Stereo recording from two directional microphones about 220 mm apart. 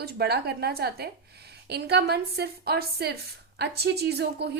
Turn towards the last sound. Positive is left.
turn(degrees=-50)  # may be behind; listen again after turning